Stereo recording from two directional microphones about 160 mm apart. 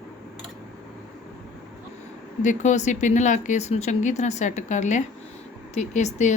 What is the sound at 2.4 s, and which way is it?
Speech, 50° left (ahead or behind).